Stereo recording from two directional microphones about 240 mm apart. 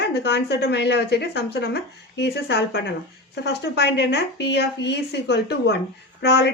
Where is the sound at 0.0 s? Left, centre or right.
Left.